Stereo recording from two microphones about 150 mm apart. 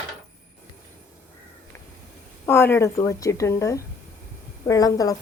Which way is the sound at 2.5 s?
15° left (ahead or behind).